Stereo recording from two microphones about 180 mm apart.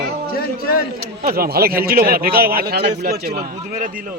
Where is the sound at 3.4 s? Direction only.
50° right (ahead or behind).